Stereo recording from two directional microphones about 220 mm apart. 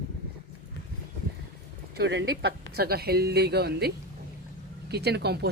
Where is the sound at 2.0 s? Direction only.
50° right (ahead or behind).